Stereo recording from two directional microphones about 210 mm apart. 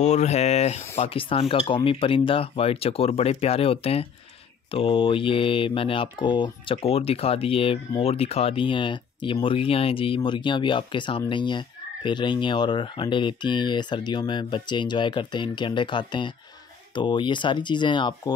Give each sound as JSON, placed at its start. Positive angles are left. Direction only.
{"t": 0.0, "sound": "speech", "side_deg": 30}